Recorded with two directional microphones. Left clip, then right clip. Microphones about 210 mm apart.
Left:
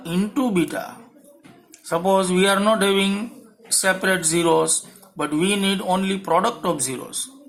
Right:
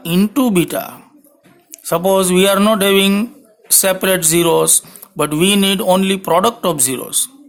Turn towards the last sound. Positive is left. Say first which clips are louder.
# right 6 dB
turn(degrees=-50)  # may be behind; listen again after turning